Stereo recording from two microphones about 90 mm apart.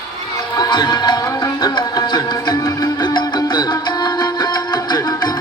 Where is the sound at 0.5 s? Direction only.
45° left (ahead or behind).